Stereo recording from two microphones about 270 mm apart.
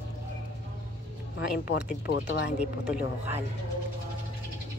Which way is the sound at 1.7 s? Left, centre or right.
Left.